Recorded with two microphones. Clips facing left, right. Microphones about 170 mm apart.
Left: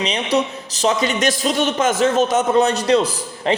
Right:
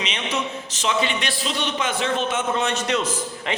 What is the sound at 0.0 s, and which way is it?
A man's voice, 35° left (ahead or behind).